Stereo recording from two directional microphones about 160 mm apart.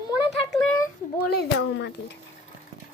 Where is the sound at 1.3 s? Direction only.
90° left.